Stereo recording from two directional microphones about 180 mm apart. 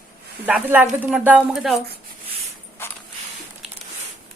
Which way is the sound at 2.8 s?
15° left (ahead or behind).